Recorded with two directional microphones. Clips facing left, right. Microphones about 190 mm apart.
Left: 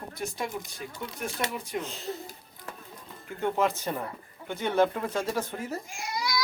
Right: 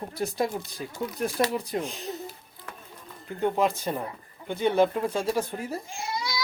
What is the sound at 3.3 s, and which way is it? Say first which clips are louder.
Speech: right 2 dB; 15° right (ahead or behind).